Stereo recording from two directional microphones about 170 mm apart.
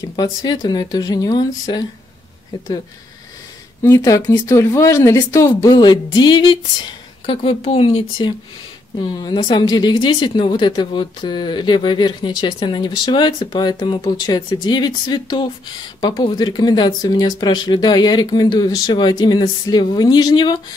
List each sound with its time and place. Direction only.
0.1 s speech: 25° left (ahead or behind)
3.8 s speech: 20° left (ahead or behind)